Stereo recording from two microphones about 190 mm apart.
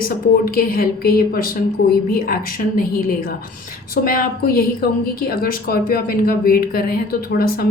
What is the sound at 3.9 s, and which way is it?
A woman's voice, 50° left (ahead or behind).